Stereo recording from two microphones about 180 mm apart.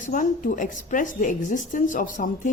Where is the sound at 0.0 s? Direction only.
45° left (ahead or behind).